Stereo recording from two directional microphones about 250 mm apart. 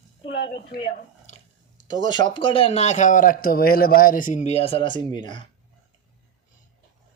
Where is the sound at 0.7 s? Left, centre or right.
Left.